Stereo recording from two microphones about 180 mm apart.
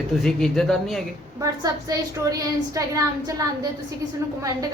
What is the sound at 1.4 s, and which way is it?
A woman's voice, 20° right (ahead or behind).